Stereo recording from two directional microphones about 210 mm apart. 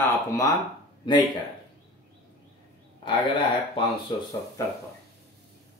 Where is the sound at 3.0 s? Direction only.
20° left (ahead or behind).